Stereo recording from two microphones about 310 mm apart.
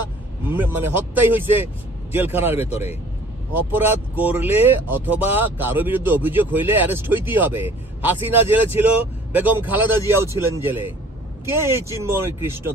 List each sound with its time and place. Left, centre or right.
0.7 s speech: centre
12.0 s speech: centre